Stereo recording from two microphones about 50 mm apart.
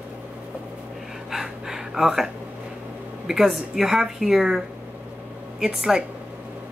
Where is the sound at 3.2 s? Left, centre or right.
Centre.